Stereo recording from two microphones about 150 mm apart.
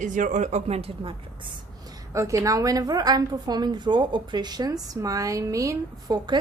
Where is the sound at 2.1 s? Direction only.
20° right (ahead or behind).